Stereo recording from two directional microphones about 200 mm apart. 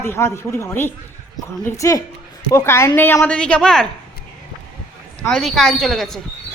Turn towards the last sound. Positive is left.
turn(degrees=0)  # may be behind; listen again after turning